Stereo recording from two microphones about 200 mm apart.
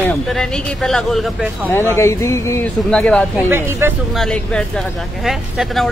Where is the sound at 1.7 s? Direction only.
10° left (ahead or behind).